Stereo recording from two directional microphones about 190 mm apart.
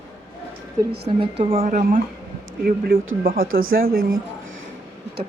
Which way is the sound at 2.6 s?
50° right (ahead or behind).